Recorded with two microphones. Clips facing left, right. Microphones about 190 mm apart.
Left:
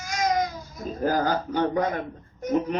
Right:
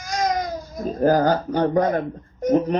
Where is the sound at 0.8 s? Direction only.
35° right (ahead or behind).